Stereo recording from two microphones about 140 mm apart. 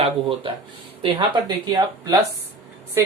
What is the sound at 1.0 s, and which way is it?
Speech, 30° right (ahead or behind).